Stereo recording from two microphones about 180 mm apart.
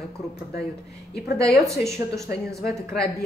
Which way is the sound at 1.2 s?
60° left (ahead or behind).